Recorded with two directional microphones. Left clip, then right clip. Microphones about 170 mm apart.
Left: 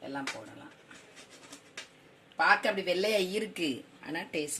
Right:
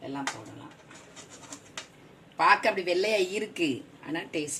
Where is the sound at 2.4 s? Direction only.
45° left (ahead or behind).